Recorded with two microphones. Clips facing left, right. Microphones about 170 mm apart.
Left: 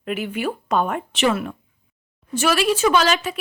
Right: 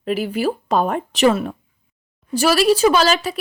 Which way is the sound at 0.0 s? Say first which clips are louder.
Right 4 dB; 35° right (ahead or behind).